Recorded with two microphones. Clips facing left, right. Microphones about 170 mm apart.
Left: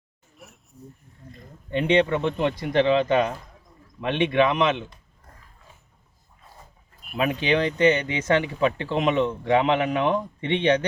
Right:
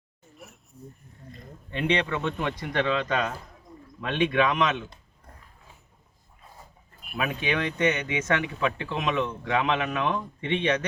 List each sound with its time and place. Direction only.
0.3 s a sound: centre (ahead or behind)
1.7 s speech: 25° left (ahead or behind)
7.2 s speech: 30° left (ahead or behind)